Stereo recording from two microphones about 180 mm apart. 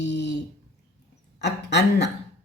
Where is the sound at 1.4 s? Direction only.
75° left (ahead or behind).